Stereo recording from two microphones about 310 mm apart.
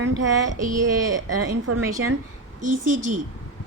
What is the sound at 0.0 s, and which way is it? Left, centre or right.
Child singing, right.